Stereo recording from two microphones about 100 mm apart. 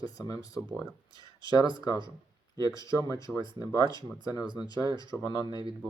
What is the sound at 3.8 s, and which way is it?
Speech, 45° right (ahead or behind).